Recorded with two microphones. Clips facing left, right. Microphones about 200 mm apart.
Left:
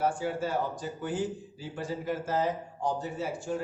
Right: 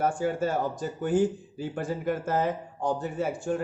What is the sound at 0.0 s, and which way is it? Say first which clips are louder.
A man's voice: right 3 dB; 50° right (ahead or behind).